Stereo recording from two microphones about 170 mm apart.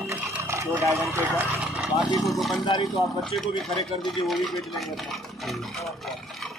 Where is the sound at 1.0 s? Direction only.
15° right (ahead or behind).